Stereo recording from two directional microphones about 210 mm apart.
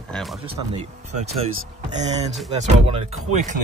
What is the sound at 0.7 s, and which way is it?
Speech, 30° right (ahead or behind).